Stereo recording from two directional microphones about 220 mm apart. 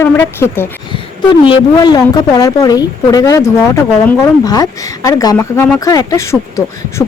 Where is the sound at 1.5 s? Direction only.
20° left (ahead or behind).